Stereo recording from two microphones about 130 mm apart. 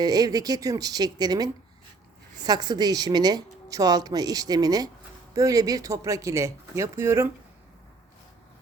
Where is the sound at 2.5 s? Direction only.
30° right (ahead or behind).